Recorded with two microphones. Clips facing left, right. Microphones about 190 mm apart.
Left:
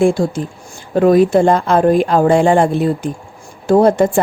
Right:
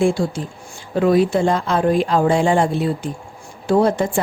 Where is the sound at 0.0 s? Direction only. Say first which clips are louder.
Left 4 dB; 45° left (ahead or behind).